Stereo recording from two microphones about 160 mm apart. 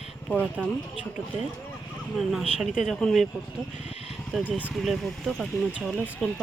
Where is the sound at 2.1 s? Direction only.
5° right (ahead or behind).